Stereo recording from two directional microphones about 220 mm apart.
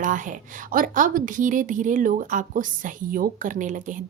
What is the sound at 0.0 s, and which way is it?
A woman's voice, 35° right (ahead or behind).